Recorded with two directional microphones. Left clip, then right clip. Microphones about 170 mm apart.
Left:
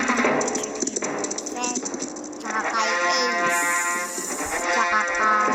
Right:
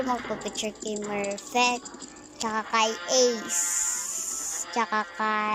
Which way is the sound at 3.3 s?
55° left (ahead or behind).